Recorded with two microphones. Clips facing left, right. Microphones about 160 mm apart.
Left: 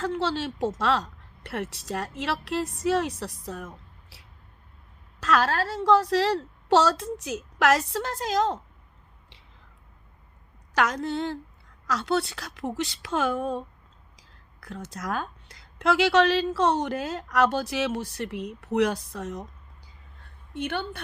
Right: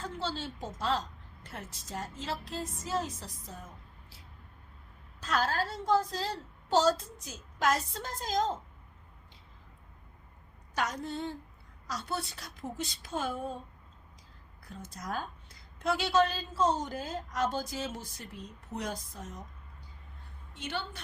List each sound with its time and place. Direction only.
0.0 s speech: 75° left (ahead or behind)
10.8 s a woman's voice: 85° left
14.2 s speech: 85° left
20.5 s a woman's voice: 60° left (ahead or behind)